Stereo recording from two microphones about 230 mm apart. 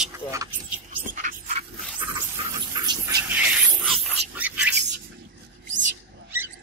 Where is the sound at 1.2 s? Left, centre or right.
Right.